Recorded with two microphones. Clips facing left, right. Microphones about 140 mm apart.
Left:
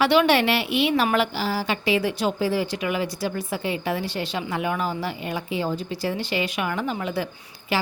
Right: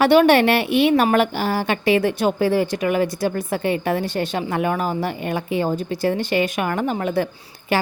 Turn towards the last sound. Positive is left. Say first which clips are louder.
# right 4 dB
turn(degrees=-50)  # may be behind; listen again after turning